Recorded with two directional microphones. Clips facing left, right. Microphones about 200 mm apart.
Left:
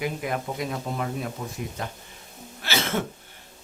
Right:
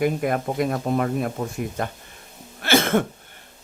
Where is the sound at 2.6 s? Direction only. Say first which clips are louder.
Right 8 dB; 55° right (ahead or behind).